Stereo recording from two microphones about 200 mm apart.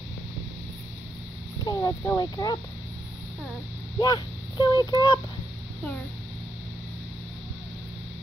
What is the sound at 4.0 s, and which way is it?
Speech, 20° left (ahead or behind).